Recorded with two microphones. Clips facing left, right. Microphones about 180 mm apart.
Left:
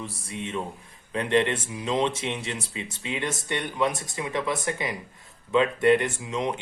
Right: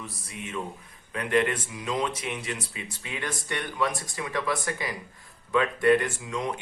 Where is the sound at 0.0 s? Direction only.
30° left (ahead or behind).